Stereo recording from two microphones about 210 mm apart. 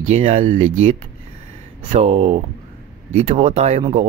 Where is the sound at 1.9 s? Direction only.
30° right (ahead or behind).